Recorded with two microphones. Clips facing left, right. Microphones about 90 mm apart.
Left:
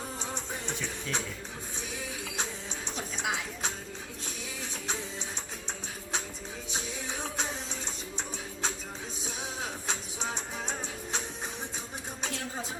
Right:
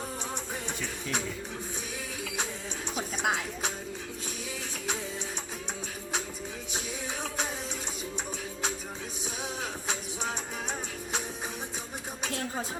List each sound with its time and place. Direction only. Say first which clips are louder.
0.8 s music: right 1 dB; centre (ahead or behind)
3.2 s music: right 3 dB; 55° right (ahead or behind)